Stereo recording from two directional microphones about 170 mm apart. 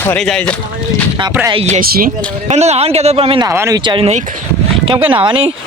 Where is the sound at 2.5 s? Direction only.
40° right (ahead or behind).